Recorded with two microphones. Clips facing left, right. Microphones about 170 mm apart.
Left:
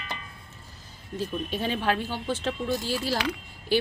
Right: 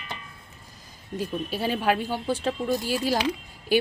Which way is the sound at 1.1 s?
10° right (ahead or behind).